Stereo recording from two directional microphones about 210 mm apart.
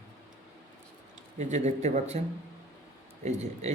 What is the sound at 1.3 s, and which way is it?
Speech, 35° right (ahead or behind).